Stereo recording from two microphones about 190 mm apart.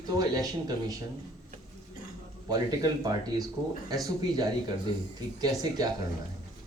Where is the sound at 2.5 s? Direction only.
20° right (ahead or behind).